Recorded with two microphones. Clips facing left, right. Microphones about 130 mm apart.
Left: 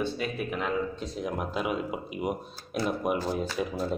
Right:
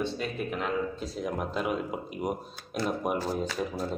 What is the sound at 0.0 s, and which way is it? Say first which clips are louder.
A man's voice: left 1 dB; 5° left (ahead or behind).